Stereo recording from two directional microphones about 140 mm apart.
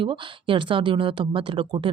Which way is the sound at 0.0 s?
35° right (ahead or behind).